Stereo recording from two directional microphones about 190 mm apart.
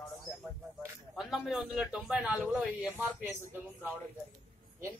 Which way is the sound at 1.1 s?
5° right (ahead or behind).